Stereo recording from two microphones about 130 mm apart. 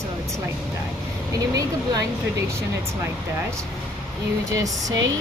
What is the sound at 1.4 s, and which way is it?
Speech, 30° right (ahead or behind).